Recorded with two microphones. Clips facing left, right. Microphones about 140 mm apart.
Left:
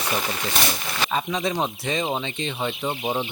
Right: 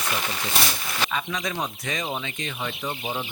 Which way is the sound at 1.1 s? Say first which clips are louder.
Left 4 dB; 30° left (ahead or behind).